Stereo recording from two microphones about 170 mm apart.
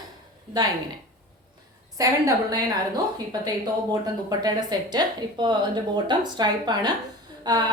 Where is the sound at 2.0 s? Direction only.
20° right (ahead or behind).